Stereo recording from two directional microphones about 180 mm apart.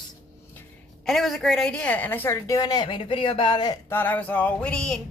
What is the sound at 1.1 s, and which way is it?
A woman's voice, centre (ahead or behind).